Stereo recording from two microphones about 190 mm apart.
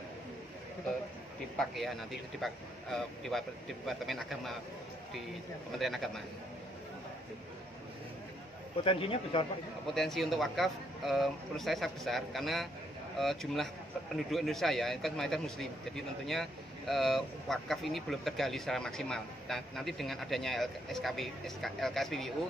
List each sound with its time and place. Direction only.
1.6 s speech: centre (ahead or behind)
5.8 s speech: centre (ahead or behind)
8.8 s speech: 30° left (ahead or behind)
9.9 s speech: centre (ahead or behind)